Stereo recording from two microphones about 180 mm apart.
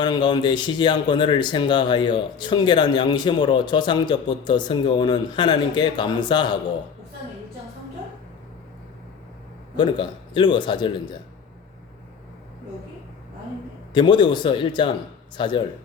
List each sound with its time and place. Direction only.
0.0 s speech: 25° left (ahead or behind)
9.7 s speech: 25° left (ahead or behind)
13.9 s speech: 25° left (ahead or behind)